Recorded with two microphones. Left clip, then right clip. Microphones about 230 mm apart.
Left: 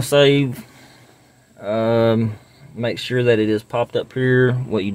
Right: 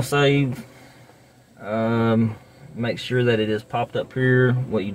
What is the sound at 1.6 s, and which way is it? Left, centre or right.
Speech, left.